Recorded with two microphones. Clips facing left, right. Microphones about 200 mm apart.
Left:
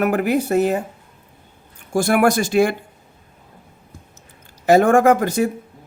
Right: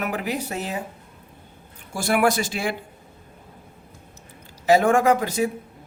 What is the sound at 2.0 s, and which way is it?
Speech, 50° left (ahead or behind).